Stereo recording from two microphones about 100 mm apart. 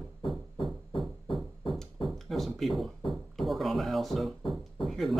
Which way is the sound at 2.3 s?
Centre (ahead or behind).